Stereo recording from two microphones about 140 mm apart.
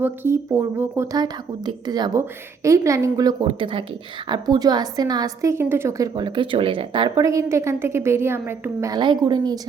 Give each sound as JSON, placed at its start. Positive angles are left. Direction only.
{"t": 0.0, "sound": "a woman's voice", "side_deg": -15}
{"t": 1.1, "sound": "a woman's voice", "side_deg": -30}
{"t": 3.4, "sound": "a woman's voice", "side_deg": -40}
{"t": 6.1, "sound": "speech", "side_deg": -35}
{"t": 7.3, "sound": "a woman's voice", "side_deg": -20}
{"t": 8.9, "sound": "a woman's voice", "side_deg": -30}